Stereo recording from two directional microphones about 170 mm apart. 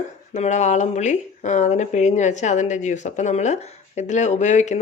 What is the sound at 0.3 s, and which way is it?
Speech, 45° left (ahead or behind).